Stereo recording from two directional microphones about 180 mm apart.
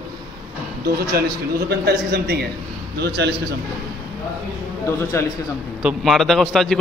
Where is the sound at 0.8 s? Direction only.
60° right (ahead or behind).